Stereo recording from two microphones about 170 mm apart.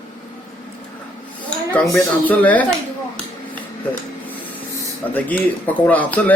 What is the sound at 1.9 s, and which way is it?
Speech, 10° left (ahead or behind).